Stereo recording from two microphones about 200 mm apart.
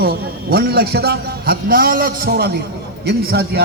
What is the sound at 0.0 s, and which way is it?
A man's voice, 50° right (ahead or behind).